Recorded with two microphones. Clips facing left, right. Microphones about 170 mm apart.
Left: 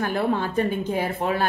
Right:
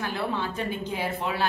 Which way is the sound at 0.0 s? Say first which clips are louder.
Left 6 dB; 50° left (ahead or behind).